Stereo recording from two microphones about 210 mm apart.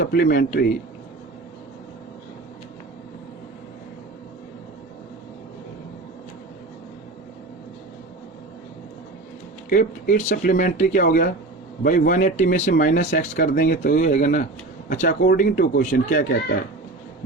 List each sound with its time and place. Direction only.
0.0 s speech: 45° left (ahead or behind)
9.6 s speech: 40° left (ahead or behind)